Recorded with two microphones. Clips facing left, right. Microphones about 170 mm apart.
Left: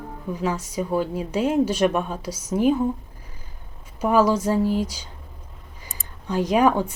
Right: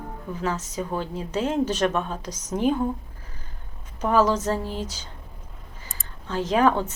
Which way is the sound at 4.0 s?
10° left (ahead or behind).